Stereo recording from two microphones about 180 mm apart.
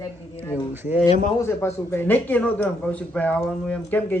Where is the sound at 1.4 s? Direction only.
15° left (ahead or behind).